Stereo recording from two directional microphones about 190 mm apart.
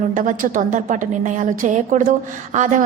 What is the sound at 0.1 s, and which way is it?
A woman's voice, 45° right (ahead or behind).